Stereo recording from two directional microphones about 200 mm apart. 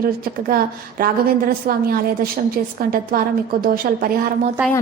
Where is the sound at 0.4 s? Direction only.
45° right (ahead or behind).